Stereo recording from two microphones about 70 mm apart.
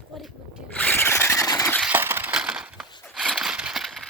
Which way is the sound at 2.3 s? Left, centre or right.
Centre.